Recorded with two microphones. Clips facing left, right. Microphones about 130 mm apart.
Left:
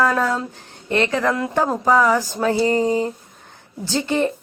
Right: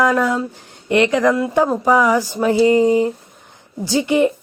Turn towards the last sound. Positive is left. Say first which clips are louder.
# right 5 dB
turn(degrees=-15)  # may be behind; listen again after turning